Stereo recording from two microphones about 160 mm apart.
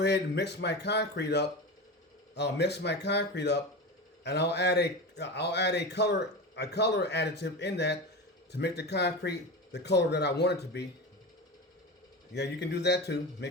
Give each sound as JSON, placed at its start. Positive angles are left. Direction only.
{"t": 0.0, "sound": "a man's voice", "side_deg": 90}
{"t": 12.3, "sound": "a man's voice", "side_deg": 90}